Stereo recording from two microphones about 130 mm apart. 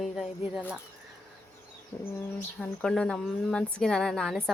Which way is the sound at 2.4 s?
5° left (ahead or behind).